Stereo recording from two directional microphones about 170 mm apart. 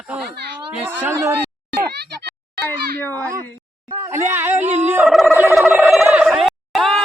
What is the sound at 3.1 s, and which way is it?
Speech, 20° right (ahead or behind).